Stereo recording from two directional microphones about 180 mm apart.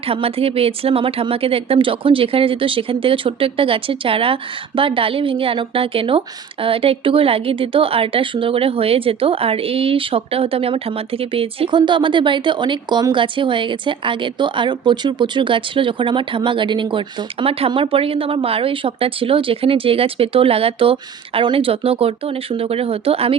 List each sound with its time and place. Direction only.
0.1 s a woman's voice: 30° right (ahead or behind)